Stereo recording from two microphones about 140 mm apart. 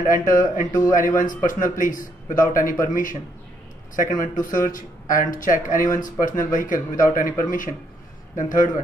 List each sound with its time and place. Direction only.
0.1 s a man's voice: 70° left (ahead or behind)